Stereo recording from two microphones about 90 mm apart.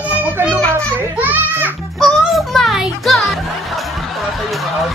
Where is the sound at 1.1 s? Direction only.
20° right (ahead or behind).